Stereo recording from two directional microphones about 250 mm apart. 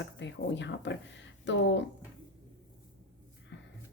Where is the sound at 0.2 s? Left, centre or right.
Left.